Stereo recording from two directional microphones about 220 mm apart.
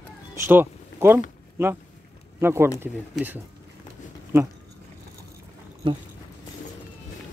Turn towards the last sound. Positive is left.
turn(degrees=-25)  # may be behind; listen again after turning